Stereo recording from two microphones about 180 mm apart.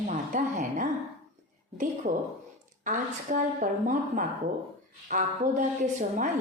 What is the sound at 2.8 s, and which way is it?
A woman's voice, 45° right (ahead or behind).